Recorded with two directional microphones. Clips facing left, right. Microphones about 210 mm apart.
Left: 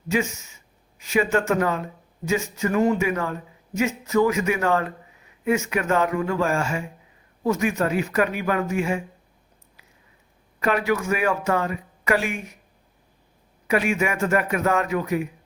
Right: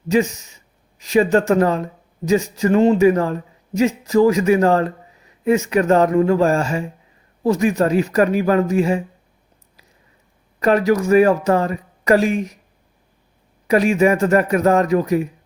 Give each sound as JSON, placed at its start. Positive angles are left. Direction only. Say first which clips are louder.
{"t": 0.1, "sound": "speech", "louder": "right 7 dB", "side_deg": -35}
{"t": 10.6, "sound": "speech", "louder": "right 7 dB", "side_deg": -40}
{"t": 13.7, "sound": "speech", "louder": "right 8 dB", "side_deg": -35}